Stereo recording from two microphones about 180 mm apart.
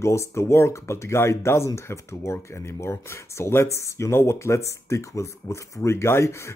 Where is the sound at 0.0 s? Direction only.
15° left (ahead or behind).